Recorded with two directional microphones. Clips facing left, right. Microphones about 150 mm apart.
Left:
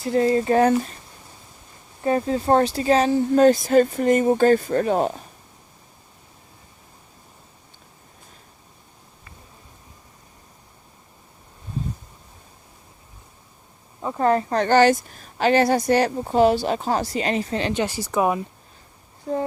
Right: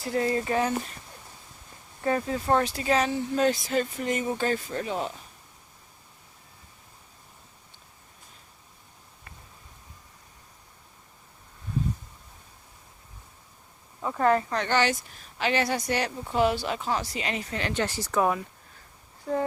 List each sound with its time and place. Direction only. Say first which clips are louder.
0.0 s speech: left 7 dB; 25° left (ahead or behind)
0.5 s speech: left 11 dB; 50° left (ahead or behind)
2.0 s speech: left 5 dB; 25° left (ahead or behind); by 5.2 s 50° left (ahead or behind)
14.0 s a woman's voice: left 3 dB; 25° left (ahead or behind)
17.8 s speech: left 4 dB; 10° left (ahead or behind)